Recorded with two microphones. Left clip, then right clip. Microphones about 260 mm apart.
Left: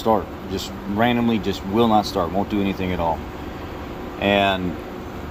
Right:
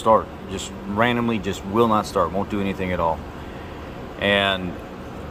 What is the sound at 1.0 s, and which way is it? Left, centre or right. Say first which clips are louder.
Speech: left 1 dB; centre.